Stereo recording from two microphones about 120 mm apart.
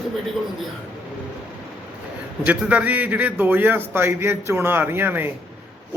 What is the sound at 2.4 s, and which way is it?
A man's voice, 10° right (ahead or behind).